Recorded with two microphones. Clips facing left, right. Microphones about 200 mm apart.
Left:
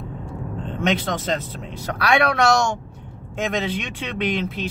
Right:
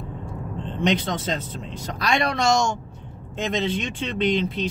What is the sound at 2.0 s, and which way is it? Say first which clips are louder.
Speech: left 4 dB; 60° left (ahead or behind).